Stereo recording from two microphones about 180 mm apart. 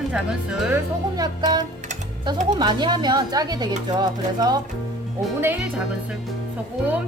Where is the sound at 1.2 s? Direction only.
25° right (ahead or behind).